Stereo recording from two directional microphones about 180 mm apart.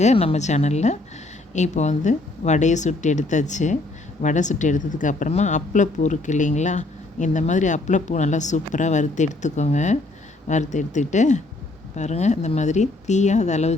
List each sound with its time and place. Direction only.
0.0 s a woman's voice: 35° left (ahead or behind)